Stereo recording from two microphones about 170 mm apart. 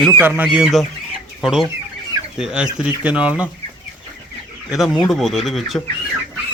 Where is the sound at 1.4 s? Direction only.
5° right (ahead or behind).